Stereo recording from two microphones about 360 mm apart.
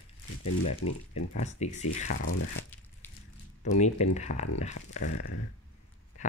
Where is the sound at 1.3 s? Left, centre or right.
Centre.